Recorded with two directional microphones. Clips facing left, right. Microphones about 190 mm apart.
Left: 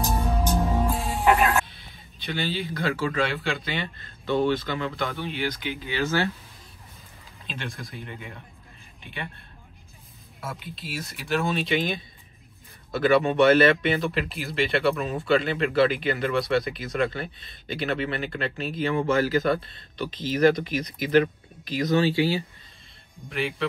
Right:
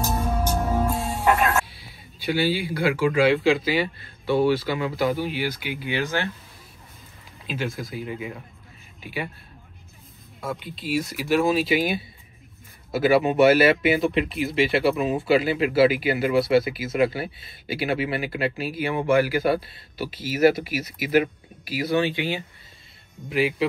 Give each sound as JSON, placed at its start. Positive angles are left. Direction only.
{"t": 0.2, "sound": "music", "side_deg": 15}
{"t": 1.7, "sound": "speech", "side_deg": -5}
{"t": 3.3, "sound": "speech", "side_deg": 0}
{"t": 7.4, "sound": "speech", "side_deg": -5}
{"t": 10.6, "sound": "speech", "side_deg": 0}